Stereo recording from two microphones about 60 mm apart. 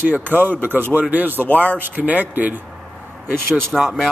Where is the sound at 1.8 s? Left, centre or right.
Right.